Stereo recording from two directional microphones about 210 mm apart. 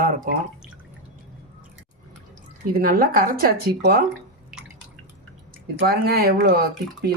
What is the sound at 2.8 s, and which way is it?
Speech, 45° right (ahead or behind).